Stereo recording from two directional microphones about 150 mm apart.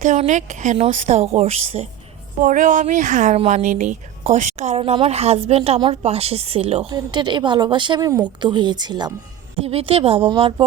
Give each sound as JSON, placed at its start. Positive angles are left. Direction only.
{"t": 0.0, "sound": "a woman's voice", "side_deg": -55}
{"t": 2.4, "sound": "a woman's voice", "side_deg": -60}
{"t": 6.9, "sound": "a woman's voice", "side_deg": -30}
{"t": 9.6, "sound": "a woman's voice", "side_deg": -40}